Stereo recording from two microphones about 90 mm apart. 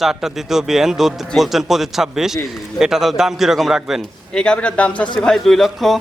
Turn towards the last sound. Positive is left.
turn(degrees=0)  # may be behind; listen again after turning